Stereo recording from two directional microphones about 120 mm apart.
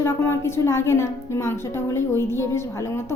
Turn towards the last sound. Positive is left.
turn(degrees=20)  # may be behind; listen again after turning